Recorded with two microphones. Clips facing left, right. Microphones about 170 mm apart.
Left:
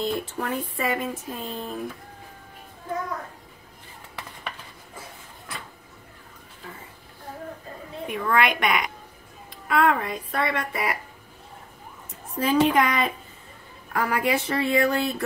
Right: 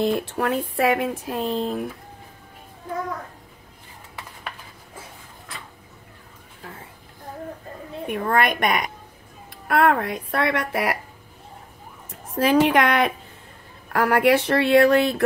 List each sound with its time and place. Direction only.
0.0 s speech: 70° right (ahead or behind)
8.1 s a woman's voice: 45° right (ahead or behind)
9.7 s speech: 60° right (ahead or behind)
12.4 s speech: 75° right (ahead or behind)